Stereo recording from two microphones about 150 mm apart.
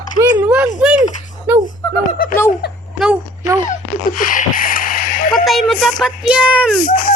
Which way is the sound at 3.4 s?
55° left (ahead or behind).